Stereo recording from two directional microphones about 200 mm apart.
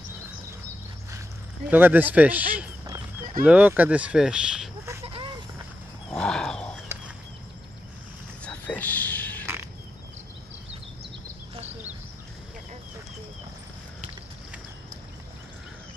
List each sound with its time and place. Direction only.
1.7 s speech: 10° right (ahead or behind)
5.0 s goat: 30° right (ahead or behind)
6.0 s wild animals: 5° left (ahead or behind)
8.5 s a sound: 10° left (ahead or behind)